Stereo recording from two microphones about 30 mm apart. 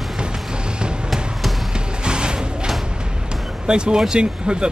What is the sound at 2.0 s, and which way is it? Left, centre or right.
Music, right.